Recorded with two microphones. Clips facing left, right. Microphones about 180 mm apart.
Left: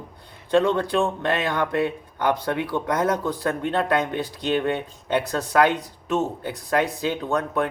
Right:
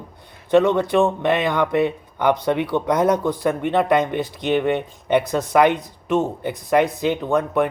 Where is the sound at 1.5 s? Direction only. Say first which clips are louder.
Right 4 dB; 15° right (ahead or behind).